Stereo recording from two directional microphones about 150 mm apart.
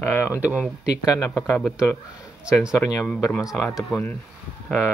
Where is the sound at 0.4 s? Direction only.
10° right (ahead or behind).